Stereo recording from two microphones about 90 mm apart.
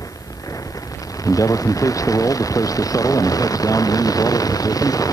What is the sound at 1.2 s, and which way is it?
Vehicle, 40° left (ahead or behind).